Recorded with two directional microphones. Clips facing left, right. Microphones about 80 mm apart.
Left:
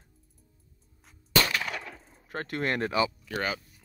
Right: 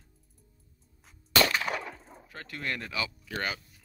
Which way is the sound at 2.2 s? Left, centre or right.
Left.